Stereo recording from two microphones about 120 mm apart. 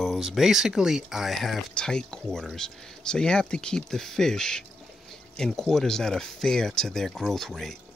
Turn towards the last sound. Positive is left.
turn(degrees=0)  # may be behind; listen again after turning